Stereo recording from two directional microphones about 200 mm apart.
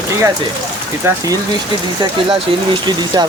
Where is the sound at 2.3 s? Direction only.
25° right (ahead or behind).